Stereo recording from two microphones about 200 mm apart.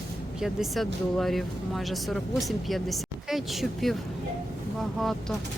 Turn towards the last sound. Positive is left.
turn(degrees=0)  # may be behind; listen again after turning